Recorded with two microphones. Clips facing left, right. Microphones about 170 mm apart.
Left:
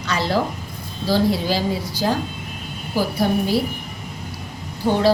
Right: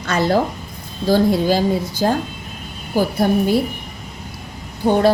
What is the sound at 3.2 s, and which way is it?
Speech, 50° right (ahead or behind).